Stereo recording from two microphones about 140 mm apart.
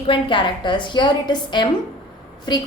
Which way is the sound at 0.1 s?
35° left (ahead or behind).